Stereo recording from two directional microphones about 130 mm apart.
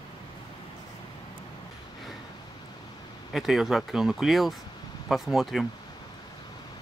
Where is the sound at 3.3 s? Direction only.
Centre (ahead or behind).